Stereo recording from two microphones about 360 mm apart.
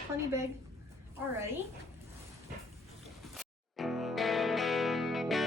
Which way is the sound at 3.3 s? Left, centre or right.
Centre.